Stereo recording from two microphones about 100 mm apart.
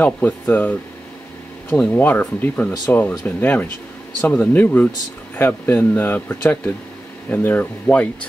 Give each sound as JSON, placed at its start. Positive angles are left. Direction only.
{"t": 0.0, "sound": "speech", "side_deg": 20}